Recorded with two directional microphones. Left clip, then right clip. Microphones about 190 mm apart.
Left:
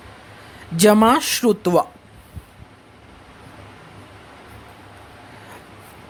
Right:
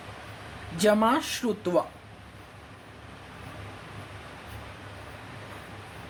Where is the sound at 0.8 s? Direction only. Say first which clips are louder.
Left 9 dB; 60° left (ahead or behind).